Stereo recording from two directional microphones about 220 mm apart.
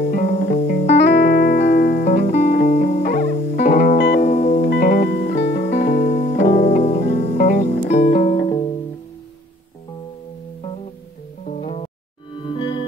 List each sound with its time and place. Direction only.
0.0 s music: 35° left (ahead or behind)
5.5 s music: 30° left (ahead or behind)
8.5 s music: 20° left (ahead or behind)
11.4 s music: 35° left (ahead or behind)
12.5 s music: 20° left (ahead or behind)